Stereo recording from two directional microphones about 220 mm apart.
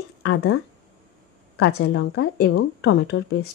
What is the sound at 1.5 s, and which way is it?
Speech, 55° left (ahead or behind).